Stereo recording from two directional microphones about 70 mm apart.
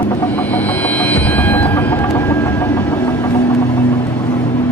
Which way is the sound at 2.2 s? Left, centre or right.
Left.